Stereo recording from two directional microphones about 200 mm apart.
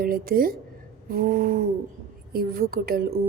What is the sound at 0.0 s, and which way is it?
Speech, 45° right (ahead or behind).